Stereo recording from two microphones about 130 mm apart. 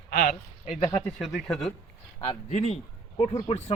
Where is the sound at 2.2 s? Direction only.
50° left (ahead or behind).